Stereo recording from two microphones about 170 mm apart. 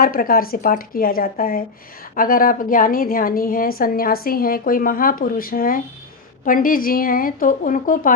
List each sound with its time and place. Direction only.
0.0 s a woman's voice: 55° left (ahead or behind)